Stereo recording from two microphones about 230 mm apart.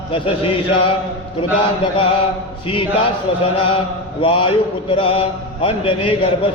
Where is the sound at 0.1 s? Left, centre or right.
Left.